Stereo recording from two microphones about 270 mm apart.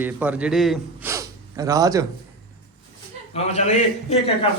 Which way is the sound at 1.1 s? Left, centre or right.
Centre.